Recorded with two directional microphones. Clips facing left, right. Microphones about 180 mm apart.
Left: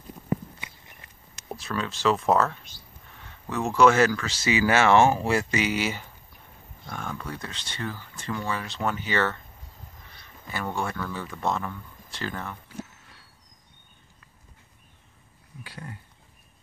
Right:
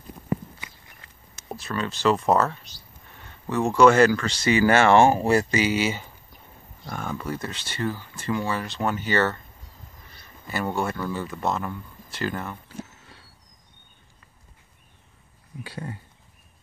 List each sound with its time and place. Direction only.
1.5 s speech: centre (ahead or behind)
10.5 s speech: 5° right (ahead or behind)
15.6 s speech: 25° right (ahead or behind)